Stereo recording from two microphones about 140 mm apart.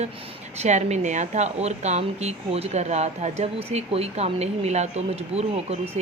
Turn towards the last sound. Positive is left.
turn(degrees=-50)  # may be behind; listen again after turning